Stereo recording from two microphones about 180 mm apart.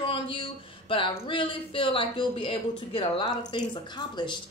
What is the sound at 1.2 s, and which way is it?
Speech, 30° left (ahead or behind).